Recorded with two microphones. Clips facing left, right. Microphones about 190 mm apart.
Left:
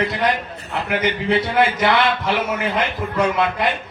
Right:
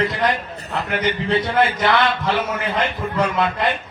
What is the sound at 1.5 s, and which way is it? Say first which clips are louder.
Speech: even; 15° left (ahead or behind).